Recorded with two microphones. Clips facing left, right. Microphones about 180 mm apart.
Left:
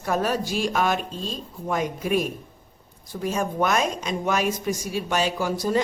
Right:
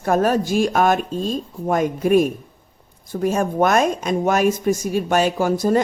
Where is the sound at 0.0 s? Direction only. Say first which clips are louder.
Right 6 dB; 50° right (ahead or behind).